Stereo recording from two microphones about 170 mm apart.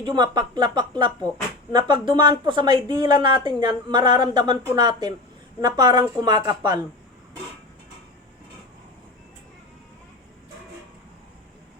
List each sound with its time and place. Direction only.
0.0 s speech: 25° right (ahead or behind)